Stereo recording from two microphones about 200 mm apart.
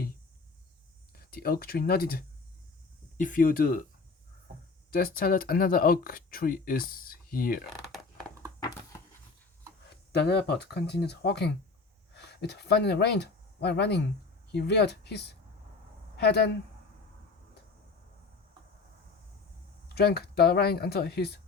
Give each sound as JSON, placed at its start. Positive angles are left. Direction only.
{"t": 1.3, "sound": "speech", "side_deg": 50}
{"t": 4.9, "sound": "speech", "side_deg": 50}
{"t": 10.1, "sound": "speech", "side_deg": 55}
{"t": 19.9, "sound": "speech", "side_deg": 55}